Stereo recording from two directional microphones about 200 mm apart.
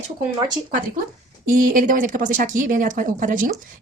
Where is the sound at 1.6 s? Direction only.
40° right (ahead or behind).